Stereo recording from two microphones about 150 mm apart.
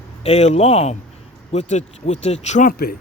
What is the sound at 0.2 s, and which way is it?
Speech, 45° left (ahead or behind).